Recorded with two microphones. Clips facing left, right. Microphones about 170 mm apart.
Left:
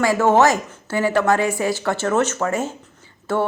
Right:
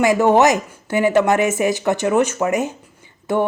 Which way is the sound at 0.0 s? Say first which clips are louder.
Right 2 dB; 15° right (ahead or behind).